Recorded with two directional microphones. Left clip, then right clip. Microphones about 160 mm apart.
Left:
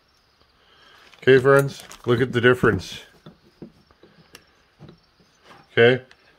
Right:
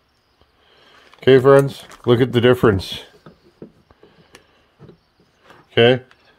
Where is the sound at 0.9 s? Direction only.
40° right (ahead or behind).